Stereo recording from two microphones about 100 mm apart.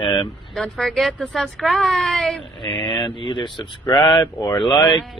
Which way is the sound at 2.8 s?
55° left (ahead or behind).